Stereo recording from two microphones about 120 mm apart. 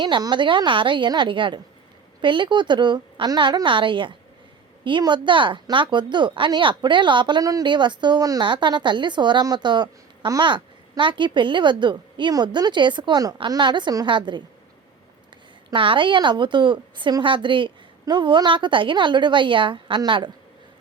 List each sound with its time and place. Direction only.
0.0 s a woman's voice: 40° right (ahead or behind)
15.7 s a woman's voice: 45° right (ahead or behind)